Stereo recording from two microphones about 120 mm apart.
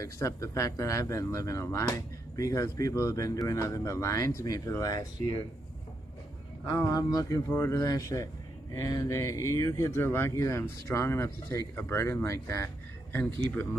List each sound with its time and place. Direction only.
0.0 s speech: 25° left (ahead or behind)
6.6 s speech: 35° left (ahead or behind); by 13.7 s 15° left (ahead or behind)